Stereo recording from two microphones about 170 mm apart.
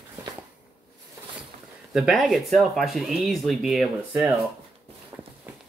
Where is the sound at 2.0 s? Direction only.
Centre (ahead or behind).